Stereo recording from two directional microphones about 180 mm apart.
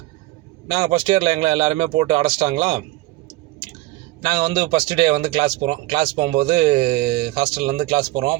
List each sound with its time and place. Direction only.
0.7 s speech: 25° right (ahead or behind)
4.2 s speech: 25° right (ahead or behind)